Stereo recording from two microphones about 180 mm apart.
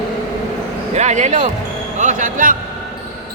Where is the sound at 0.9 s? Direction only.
40° right (ahead or behind).